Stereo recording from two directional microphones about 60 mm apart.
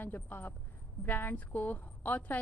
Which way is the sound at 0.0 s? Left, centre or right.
Left.